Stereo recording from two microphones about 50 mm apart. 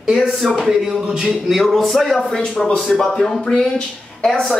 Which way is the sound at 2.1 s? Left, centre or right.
Centre.